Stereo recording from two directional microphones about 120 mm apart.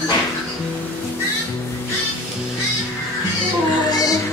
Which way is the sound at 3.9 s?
30° left (ahead or behind).